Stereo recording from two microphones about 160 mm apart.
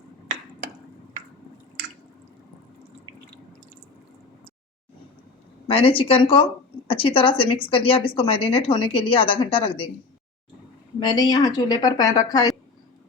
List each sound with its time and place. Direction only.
5.6 s a woman's voice: 35° left (ahead or behind)
11.0 s a woman's voice: 25° left (ahead or behind)